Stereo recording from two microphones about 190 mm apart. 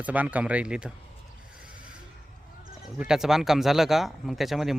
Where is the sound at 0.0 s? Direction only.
10° right (ahead or behind).